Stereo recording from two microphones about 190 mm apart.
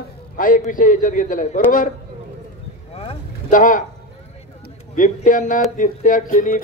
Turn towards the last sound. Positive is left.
turn(degrees=45)  # may be behind; listen again after turning